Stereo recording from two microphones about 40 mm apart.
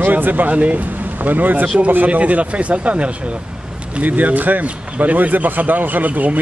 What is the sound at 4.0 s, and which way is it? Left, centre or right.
A man's voice, right.